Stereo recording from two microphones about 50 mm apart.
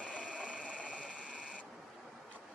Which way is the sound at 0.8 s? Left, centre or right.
Right.